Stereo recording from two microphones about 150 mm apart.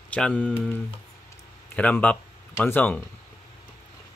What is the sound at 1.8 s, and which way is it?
Speech, 10° left (ahead or behind).